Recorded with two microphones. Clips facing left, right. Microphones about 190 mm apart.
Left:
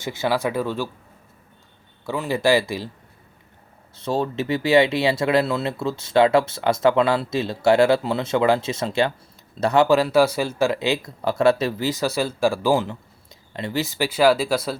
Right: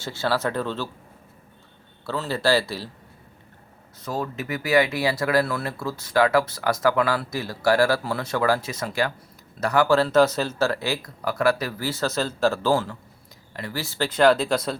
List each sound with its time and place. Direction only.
0.0 s speech: 15° left (ahead or behind)
2.0 s speech: 15° left (ahead or behind)
3.9 s speech: 25° left (ahead or behind); by 14.8 s 5° left (ahead or behind)